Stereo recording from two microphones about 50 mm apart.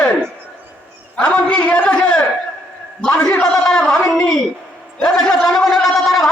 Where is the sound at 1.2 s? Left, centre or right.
Left.